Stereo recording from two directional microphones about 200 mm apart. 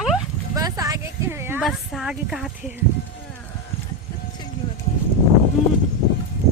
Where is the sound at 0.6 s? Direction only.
20° right (ahead or behind).